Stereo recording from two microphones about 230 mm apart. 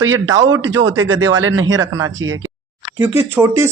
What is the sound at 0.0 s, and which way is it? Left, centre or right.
Speech, right.